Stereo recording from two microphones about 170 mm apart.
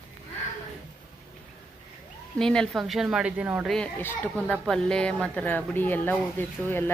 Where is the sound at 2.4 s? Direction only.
5° left (ahead or behind).